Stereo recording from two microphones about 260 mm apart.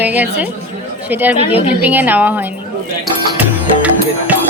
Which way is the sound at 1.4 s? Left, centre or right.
Left.